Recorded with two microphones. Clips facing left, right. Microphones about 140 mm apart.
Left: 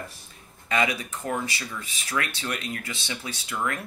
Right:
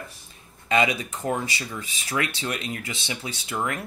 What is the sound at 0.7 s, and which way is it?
Speech, 25° right (ahead or behind).